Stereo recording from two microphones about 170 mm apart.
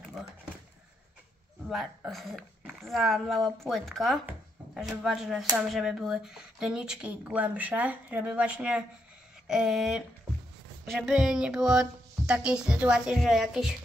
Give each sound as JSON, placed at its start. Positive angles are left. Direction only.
{"t": 1.7, "sound": "speech", "side_deg": 0}